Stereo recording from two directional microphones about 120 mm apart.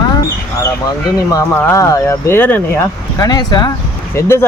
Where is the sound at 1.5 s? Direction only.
25° left (ahead or behind).